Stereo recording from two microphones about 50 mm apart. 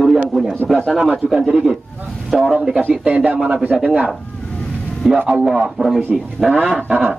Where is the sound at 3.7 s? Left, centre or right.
Centre.